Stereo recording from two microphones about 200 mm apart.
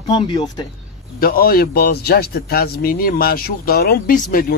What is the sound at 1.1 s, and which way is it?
A man's voice, 45° left (ahead or behind).